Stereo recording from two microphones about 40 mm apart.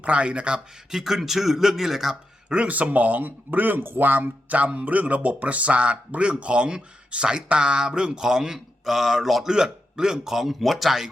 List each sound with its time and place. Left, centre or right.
0.0 s speech: right
0.9 s speech: centre
2.5 s speech: right; by 9.5 s centre
9.5 s speech: centre